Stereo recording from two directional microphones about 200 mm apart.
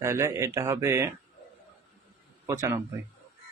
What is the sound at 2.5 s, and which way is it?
Speech, 15° right (ahead or behind).